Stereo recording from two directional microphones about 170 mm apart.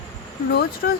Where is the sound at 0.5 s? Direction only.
70° left (ahead or behind).